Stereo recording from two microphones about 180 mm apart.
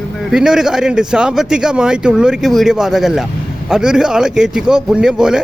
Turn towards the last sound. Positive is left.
turn(degrees=-5)  # may be behind; listen again after turning